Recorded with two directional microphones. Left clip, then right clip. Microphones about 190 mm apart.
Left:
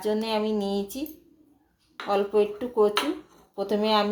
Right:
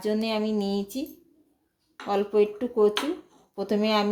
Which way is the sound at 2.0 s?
40° right (ahead or behind).